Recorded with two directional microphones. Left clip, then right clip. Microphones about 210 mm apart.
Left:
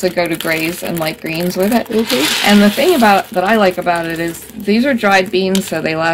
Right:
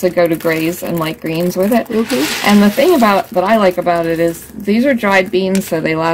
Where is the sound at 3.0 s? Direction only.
30° right (ahead or behind).